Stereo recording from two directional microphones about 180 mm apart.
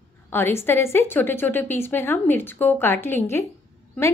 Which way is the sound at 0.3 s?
15° left (ahead or behind).